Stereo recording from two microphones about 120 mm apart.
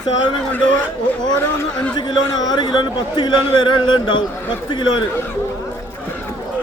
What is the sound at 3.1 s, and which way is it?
A man's voice, 40° left (ahead or behind).